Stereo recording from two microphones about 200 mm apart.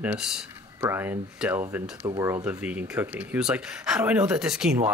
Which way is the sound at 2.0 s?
25° right (ahead or behind).